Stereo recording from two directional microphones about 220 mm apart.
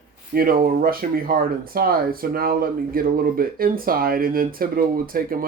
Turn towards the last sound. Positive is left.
turn(degrees=-40)  # may be behind; listen again after turning